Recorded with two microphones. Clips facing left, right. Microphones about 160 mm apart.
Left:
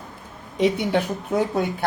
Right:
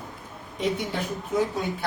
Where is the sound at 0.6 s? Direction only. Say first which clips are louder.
Left 7 dB; 70° left (ahead or behind).